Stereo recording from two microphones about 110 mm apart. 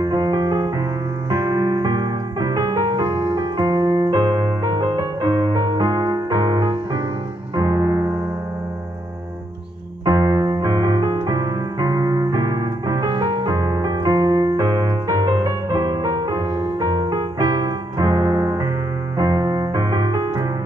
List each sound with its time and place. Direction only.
0.0 s music: 40° right (ahead or behind)
10.0 s music: 35° right (ahead or behind)